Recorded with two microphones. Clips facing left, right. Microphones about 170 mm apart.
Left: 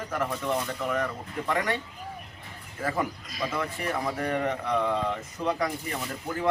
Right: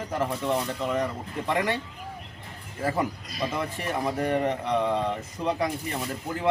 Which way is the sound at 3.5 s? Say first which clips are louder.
Left 1 dB; 20° right (ahead or behind).